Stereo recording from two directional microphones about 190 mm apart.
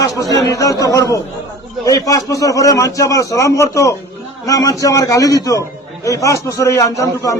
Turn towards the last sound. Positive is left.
turn(degrees=15)  # may be behind; listen again after turning